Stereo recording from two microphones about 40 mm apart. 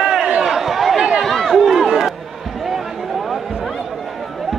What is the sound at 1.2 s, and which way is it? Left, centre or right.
Run, centre.